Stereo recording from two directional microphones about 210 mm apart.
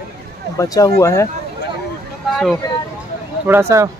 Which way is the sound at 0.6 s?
15° left (ahead or behind).